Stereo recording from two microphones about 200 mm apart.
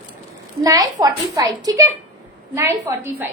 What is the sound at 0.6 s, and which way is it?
A woman's voice, 15° right (ahead or behind).